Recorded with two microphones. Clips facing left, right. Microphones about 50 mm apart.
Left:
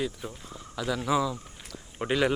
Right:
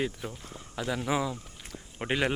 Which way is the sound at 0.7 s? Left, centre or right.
Right.